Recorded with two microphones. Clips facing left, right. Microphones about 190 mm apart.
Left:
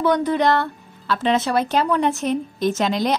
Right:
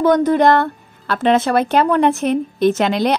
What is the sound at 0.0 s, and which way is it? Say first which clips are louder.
A woman's voice: right 5 dB; 45° right (ahead or behind).